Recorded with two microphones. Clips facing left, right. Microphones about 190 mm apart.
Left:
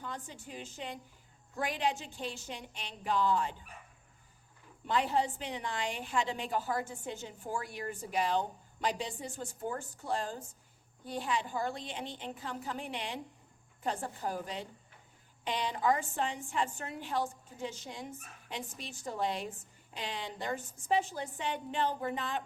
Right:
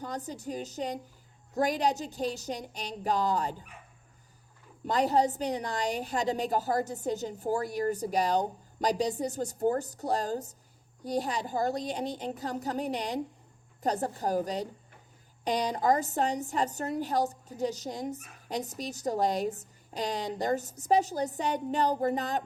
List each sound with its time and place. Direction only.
0.0 s a woman's voice: 40° right (ahead or behind)
4.9 s a woman's voice: 40° right (ahead or behind)